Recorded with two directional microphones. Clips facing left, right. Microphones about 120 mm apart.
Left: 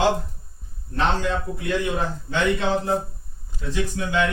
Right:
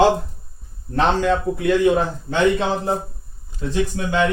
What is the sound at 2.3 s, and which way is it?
Speech, 35° right (ahead or behind).